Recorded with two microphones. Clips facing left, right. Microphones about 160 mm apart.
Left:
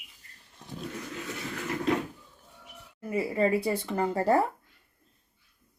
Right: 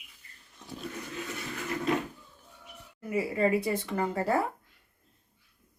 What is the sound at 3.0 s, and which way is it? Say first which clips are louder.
Speech: left 1 dB; 30° left (ahead or behind).